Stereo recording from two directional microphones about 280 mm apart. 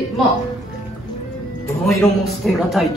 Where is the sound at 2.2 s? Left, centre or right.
Centre.